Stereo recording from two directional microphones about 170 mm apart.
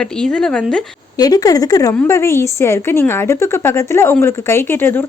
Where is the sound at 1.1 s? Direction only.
20° left (ahead or behind).